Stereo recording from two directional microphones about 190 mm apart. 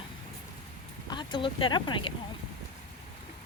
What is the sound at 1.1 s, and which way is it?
A woman's voice, 25° left (ahead or behind).